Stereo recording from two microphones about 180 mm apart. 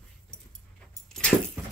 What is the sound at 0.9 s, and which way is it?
Keys jangling, 5° left (ahead or behind).